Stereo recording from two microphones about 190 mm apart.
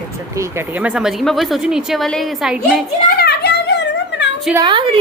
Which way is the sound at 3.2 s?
60° left (ahead or behind).